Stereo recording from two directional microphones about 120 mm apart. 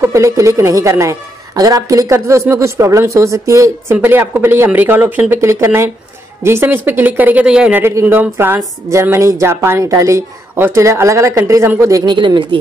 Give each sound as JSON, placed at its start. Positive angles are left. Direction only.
{"t": 0.0, "sound": "a woman's voice", "side_deg": -25}
{"t": 7.8, "sound": "a woman's voice", "side_deg": -20}
{"t": 12.1, "sound": "speech", "side_deg": -40}